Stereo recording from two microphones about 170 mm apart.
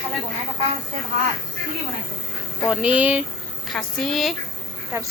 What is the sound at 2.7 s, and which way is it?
A woman's voice, 5° right (ahead or behind).